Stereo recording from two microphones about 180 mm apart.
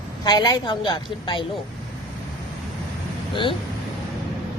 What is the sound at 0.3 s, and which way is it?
Speech, 25° left (ahead or behind).